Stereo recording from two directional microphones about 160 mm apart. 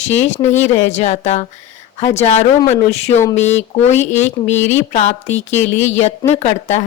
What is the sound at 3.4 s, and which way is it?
A woman's voice, 45° left (ahead or behind).